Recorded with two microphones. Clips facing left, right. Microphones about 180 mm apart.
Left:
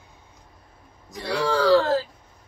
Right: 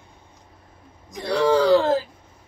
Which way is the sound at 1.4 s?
20° right (ahead or behind).